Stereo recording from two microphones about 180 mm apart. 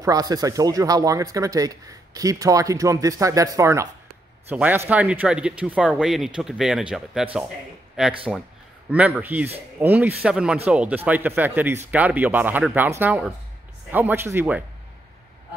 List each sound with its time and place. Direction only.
0.0 s speech: 20° right (ahead or behind)